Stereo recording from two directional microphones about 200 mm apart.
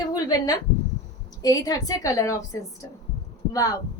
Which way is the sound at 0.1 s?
20° left (ahead or behind).